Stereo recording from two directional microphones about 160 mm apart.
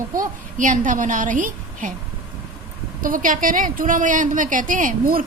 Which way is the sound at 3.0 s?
60° right (ahead or behind).